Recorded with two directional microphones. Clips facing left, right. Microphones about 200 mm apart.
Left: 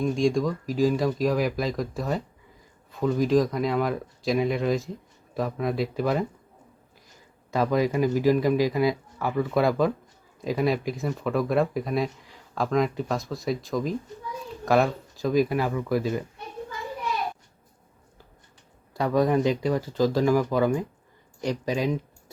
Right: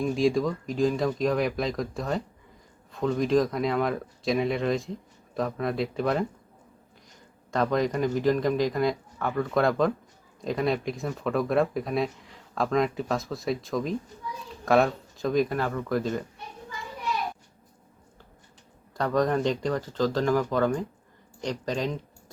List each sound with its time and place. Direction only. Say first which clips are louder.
0.0 s speech: left 1 dB; 5° right (ahead or behind)
7.5 s speech: left 2 dB; 5° left (ahead or behind)
18.9 s speech: left 2 dB; 10° left (ahead or behind)